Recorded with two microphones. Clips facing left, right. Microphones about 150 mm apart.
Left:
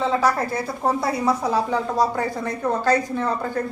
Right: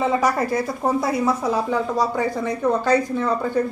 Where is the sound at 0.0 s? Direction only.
15° right (ahead or behind).